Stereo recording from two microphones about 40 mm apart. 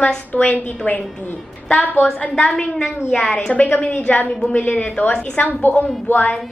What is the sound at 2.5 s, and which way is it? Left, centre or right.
A woman's voice, centre.